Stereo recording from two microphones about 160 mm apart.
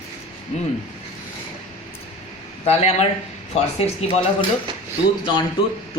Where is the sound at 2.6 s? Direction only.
40° left (ahead or behind).